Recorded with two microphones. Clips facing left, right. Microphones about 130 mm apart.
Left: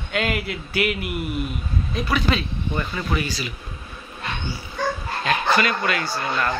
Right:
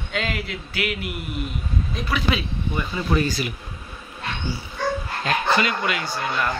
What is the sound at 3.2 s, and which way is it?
Speech, 50° right (ahead or behind).